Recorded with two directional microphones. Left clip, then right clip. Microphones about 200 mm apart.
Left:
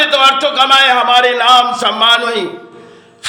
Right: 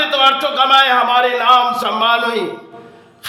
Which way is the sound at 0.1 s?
20° left (ahead or behind).